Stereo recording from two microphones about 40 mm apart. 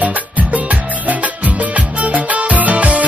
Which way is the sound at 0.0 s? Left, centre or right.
Right.